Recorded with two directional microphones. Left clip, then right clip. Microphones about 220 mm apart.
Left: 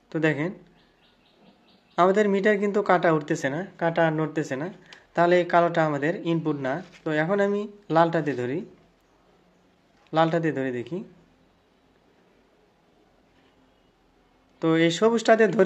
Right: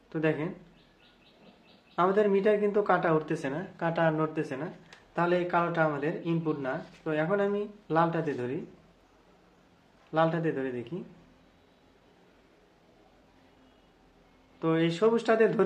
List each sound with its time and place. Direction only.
0.1 s speech: 45° left (ahead or behind)
2.0 s speech: 45° left (ahead or behind)
10.1 s speech: 45° left (ahead or behind)
14.6 s speech: 45° left (ahead or behind)